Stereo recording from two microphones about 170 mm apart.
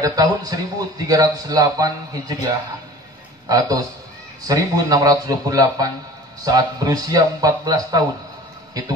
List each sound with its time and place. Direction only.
0.0 s a man's voice: 20° right (ahead or behind)
3.4 s a man's voice: 20° right (ahead or behind)